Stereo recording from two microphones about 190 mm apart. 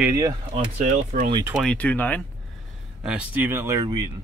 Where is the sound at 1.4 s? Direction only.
5° right (ahead or behind).